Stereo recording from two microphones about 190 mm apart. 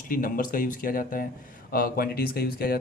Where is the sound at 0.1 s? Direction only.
45° left (ahead or behind).